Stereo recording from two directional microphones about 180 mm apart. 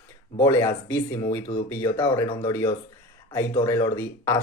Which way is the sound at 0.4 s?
15° left (ahead or behind).